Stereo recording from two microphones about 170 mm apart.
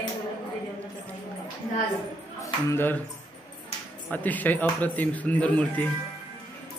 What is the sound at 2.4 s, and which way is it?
Speech, 15° left (ahead or behind).